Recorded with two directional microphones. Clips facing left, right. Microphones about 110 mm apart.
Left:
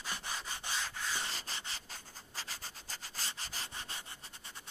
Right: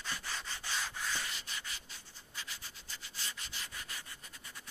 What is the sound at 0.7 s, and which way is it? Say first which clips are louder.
Sanding: even; 20° left (ahead or behind).